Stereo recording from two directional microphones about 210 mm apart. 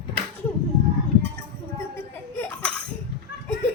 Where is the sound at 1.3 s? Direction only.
10° left (ahead or behind).